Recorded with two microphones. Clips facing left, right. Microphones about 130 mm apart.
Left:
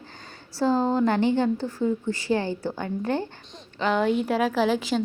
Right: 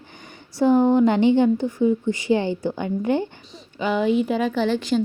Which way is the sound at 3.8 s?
5° right (ahead or behind).